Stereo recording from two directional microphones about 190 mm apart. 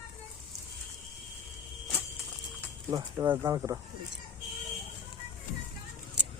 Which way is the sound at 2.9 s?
20° right (ahead or behind).